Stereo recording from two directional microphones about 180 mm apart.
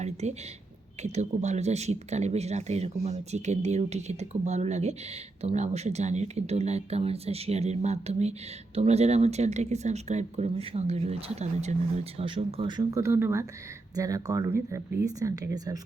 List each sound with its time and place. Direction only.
0.0 s speech: 40° right (ahead or behind); by 15.8 s 20° right (ahead or behind)